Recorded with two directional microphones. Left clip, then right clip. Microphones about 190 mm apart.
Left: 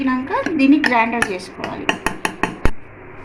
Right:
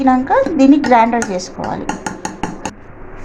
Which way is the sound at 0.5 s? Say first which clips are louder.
Right 2 dB; 40° right (ahead or behind).